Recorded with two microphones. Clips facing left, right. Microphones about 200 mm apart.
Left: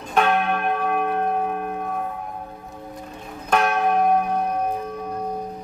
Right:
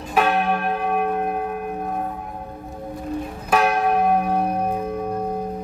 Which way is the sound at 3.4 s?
5° right (ahead or behind).